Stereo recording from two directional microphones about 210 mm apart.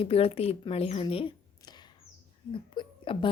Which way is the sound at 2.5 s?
25° left (ahead or behind).